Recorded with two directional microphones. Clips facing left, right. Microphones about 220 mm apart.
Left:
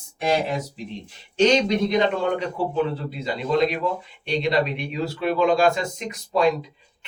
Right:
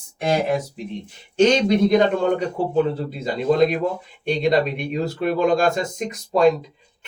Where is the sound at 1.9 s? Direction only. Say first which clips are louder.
Right 4 dB; 50° right (ahead or behind).